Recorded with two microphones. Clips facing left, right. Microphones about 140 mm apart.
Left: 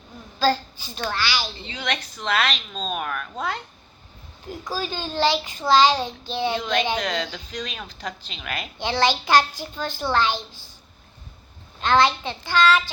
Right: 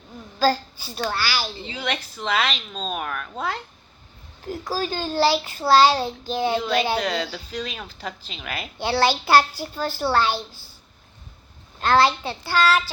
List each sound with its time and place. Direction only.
0.3 s a woman's voice: 10° right (ahead or behind)
1.2 s a child's voice: 40° right (ahead or behind)
1.7 s speech: 10° right (ahead or behind)
4.6 s a child's voice: 40° right (ahead or behind)
5.9 s speech: 10° right (ahead or behind)
8.8 s a child's voice: 40° right (ahead or behind)
9.8 s speech: 5° right (ahead or behind)
10.1 s a child's voice: 40° right (ahead or behind)
11.8 s a child's voice: 35° right (ahead or behind)